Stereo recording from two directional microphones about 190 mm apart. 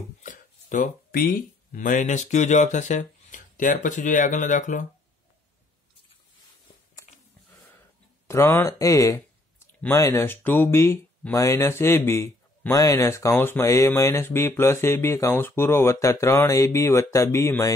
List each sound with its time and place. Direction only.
0.2 s a sound: 40° left (ahead or behind)
1.2 s speech: 50° left (ahead or behind)
8.3 s speech: 15° left (ahead or behind)